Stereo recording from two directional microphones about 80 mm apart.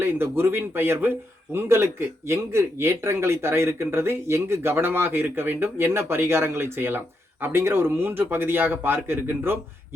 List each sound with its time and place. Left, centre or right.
0.0 s a man's voice: right